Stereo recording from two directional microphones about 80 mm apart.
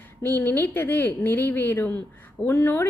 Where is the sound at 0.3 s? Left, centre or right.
Left.